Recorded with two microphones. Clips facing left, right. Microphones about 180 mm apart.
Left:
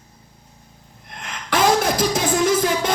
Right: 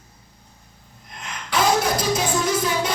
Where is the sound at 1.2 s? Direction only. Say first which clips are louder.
Left 3 dB; 55° left (ahead or behind).